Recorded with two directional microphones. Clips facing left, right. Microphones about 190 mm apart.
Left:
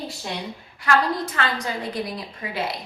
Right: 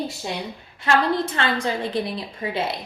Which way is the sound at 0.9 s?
25° right (ahead or behind).